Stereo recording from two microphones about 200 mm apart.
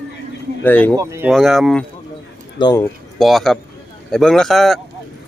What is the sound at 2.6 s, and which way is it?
Speech, 20° left (ahead or behind).